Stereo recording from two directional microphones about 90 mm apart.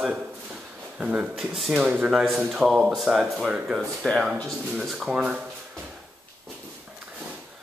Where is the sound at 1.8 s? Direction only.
20° right (ahead or behind).